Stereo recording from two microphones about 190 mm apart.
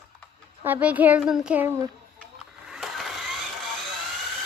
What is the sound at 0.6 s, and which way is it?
A child's voice, 10° right (ahead or behind).